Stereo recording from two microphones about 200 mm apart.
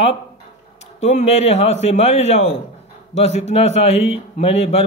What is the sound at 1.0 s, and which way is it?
A man's voice, 35° left (ahead or behind).